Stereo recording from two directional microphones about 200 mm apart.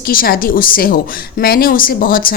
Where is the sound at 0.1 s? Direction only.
45° left (ahead or behind).